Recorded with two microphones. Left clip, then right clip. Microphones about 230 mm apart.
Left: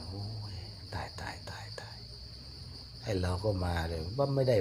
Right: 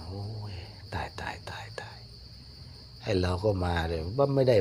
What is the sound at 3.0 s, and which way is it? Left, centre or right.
Speech, right.